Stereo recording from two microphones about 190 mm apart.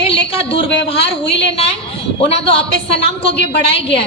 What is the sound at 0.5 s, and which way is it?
A woman's voice, 30° left (ahead or behind).